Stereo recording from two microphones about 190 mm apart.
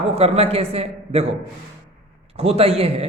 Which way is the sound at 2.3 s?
30° right (ahead or behind).